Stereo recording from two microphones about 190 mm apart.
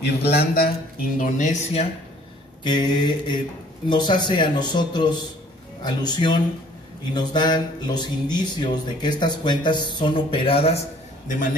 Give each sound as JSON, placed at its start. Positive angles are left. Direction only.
{"t": 0.0, "sound": "a man's voice", "side_deg": 55}
{"t": 1.1, "sound": "speech", "side_deg": 40}
{"t": 2.6, "sound": "speech", "side_deg": 25}